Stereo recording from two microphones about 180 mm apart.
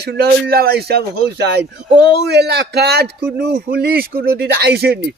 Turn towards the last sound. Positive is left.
turn(degrees=-65)  # may be behind; listen again after turning